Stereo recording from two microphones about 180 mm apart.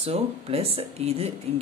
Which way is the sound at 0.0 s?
35° right (ahead or behind).